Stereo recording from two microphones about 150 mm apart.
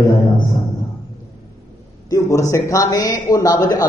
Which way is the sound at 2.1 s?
20° left (ahead or behind).